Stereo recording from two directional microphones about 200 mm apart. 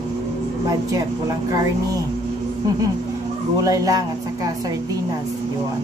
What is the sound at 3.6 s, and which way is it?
Speech, 15° right (ahead or behind).